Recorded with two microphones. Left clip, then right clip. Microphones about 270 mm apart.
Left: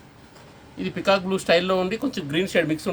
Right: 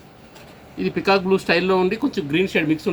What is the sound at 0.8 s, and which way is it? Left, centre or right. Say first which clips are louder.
Speech: right 3 dB; left.